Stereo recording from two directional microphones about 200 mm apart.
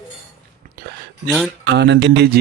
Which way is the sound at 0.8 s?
50° right (ahead or behind).